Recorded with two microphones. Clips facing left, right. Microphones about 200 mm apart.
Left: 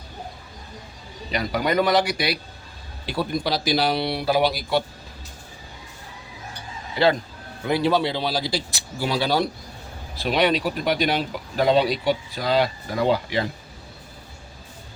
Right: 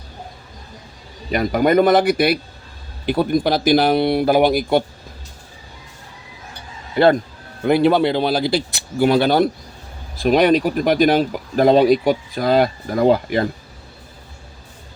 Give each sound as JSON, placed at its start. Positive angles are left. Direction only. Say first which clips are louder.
{"t": 1.3, "sound": "speech", "louder": "right 8 dB", "side_deg": -50}
{"t": 6.9, "sound": "speech", "louder": "right 6 dB", "side_deg": -55}